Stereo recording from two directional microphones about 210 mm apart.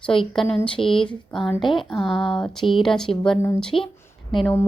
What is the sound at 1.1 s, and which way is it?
A woman's voice, 5° left (ahead or behind).